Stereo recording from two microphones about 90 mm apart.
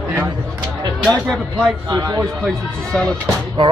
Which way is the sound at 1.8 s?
45° right (ahead or behind).